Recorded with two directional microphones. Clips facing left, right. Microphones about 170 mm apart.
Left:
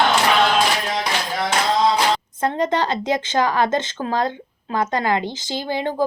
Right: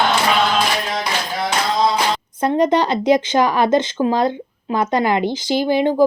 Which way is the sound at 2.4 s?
15° right (ahead or behind).